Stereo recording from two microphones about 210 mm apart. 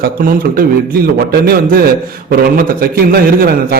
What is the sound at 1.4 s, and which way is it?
A man's voice, 45° right (ahead or behind).